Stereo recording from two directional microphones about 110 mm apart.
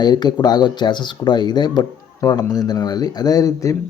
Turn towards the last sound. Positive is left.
turn(degrees=30)  # may be behind; listen again after turning